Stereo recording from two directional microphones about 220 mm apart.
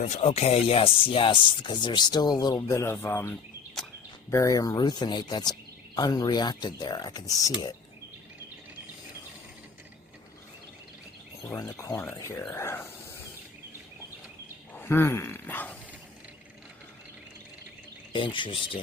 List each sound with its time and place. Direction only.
0.0 s speech: 30° left (ahead or behind)
11.4 s speech: 15° left (ahead or behind)
14.7 s a sound: 10° left (ahead or behind)
18.1 s speech: 20° left (ahead or behind)